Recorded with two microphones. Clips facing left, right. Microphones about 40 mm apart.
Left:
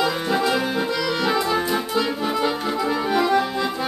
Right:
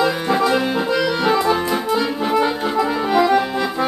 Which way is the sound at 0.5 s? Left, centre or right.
Centre.